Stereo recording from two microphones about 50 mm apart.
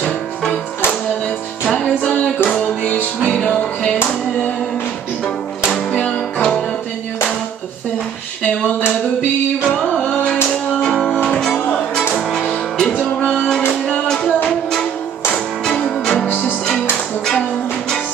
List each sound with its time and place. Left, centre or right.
3.3 s music: left
6.0 s music: centre
9.7 s music: centre
12.9 s music: left
14.0 s music: centre
15.3 s music: centre